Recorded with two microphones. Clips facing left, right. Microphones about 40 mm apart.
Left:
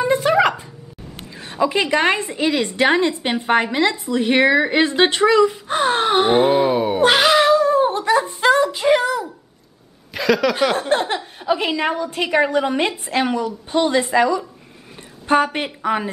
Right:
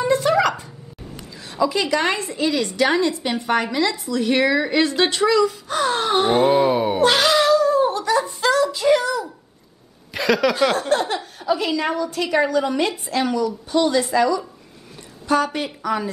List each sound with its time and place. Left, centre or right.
0.1 s a sound: left
1.3 s a woman's voice: left
6.5 s speech: centre
7.0 s cat: left
8.7 s child singing: left
10.1 s a sound: centre
10.8 s a woman's voice: left